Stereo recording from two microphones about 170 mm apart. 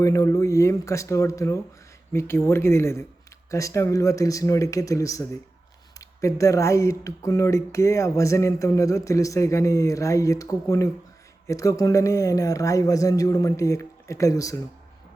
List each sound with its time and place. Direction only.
0.0 s speech: 20° left (ahead or behind)